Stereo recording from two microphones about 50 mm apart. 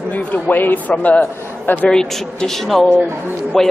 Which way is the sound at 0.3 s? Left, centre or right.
Left.